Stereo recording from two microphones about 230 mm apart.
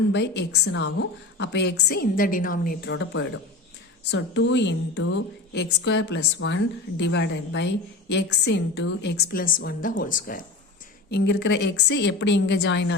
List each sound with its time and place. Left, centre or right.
0.1 s a woman's voice: left